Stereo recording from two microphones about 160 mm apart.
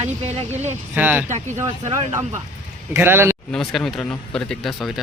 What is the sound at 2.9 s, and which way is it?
Speech, 15° right (ahead or behind).